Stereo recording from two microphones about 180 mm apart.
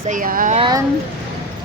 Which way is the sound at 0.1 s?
50° right (ahead or behind).